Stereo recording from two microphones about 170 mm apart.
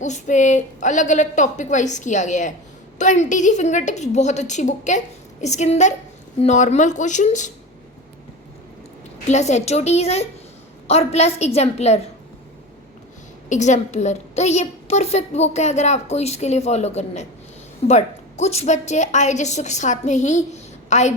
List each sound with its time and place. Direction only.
0.0 s a woman's voice: 45° left (ahead or behind)
9.2 s a woman's voice: 40° left (ahead or behind)
13.5 s a woman's voice: 45° left (ahead or behind)